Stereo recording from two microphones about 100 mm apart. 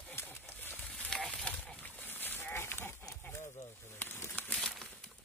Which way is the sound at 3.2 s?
25° left (ahead or behind).